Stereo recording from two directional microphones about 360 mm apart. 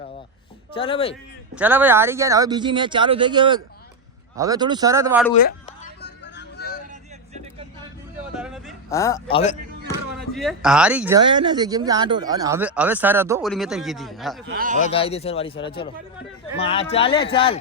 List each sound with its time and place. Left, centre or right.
0.7 s speech: centre
1.5 s speech: centre
5.3 s a sound: left
8.4 s a sound: centre
10.2 s speech: centre
14.5 s a man's voice: right
14.8 s speech: centre